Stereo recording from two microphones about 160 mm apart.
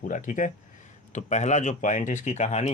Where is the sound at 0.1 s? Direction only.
55° left (ahead or behind).